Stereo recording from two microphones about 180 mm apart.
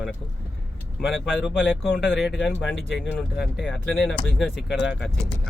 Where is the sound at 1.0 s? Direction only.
Centre (ahead or behind).